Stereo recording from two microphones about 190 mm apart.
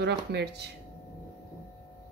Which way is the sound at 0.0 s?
60° right (ahead or behind).